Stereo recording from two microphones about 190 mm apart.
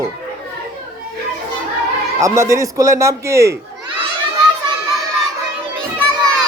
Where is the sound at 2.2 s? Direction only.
15° right (ahead or behind).